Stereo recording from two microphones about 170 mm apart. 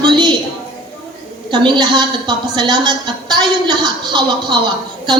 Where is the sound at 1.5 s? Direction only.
25° right (ahead or behind).